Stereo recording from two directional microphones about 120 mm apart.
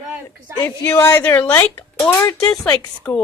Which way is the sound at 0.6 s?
20° left (ahead or behind).